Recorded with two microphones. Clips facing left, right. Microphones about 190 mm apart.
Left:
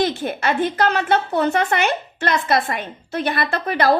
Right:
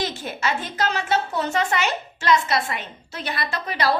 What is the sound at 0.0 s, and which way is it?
A woman's voice, 55° left (ahead or behind).